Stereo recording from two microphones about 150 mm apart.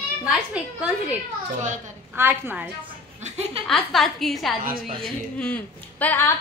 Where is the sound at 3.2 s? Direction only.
45° right (ahead or behind).